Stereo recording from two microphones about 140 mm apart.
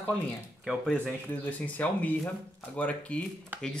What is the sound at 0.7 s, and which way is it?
Speech, 5° left (ahead or behind).